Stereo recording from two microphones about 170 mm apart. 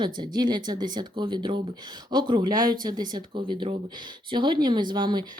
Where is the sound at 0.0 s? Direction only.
25° right (ahead or behind).